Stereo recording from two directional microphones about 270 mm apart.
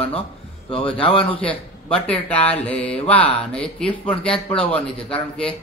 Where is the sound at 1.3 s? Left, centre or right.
Centre.